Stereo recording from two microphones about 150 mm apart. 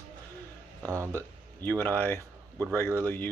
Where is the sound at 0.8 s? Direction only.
20° right (ahead or behind).